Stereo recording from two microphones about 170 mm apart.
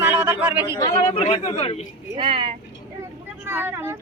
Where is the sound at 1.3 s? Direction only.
35° left (ahead or behind).